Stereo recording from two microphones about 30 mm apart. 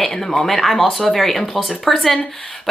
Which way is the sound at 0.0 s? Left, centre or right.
Centre.